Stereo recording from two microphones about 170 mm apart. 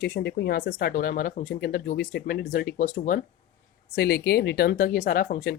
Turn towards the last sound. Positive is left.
turn(degrees=55)  # may be behind; listen again after turning